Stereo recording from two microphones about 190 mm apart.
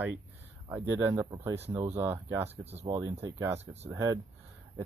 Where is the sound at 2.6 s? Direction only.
35° right (ahead or behind).